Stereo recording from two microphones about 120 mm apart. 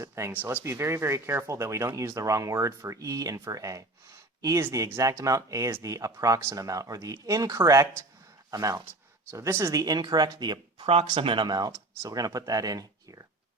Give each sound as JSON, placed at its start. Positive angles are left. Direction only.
{"t": 0.0, "sound": "speech", "side_deg": -25}
{"t": 10.8, "sound": "speech", "side_deg": -55}